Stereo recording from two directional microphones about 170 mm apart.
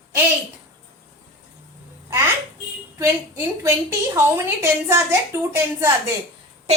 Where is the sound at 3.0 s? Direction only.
15° right (ahead or behind).